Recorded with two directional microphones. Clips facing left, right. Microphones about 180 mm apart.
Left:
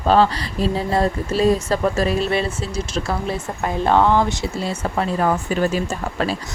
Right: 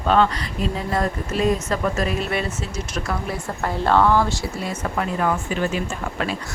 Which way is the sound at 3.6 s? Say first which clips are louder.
Left 1 dB; 15° left (ahead or behind).